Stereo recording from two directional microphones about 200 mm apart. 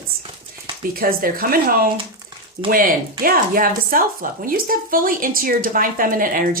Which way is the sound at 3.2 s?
45° right (ahead or behind).